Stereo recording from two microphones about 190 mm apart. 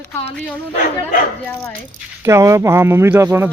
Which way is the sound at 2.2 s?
15° right (ahead or behind).